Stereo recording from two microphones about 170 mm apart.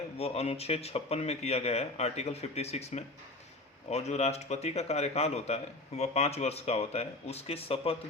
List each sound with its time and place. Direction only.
0.2 s speech: 40° left (ahead or behind)